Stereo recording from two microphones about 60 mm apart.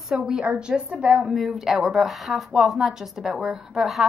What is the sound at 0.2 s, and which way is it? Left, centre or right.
A woman's voice, centre.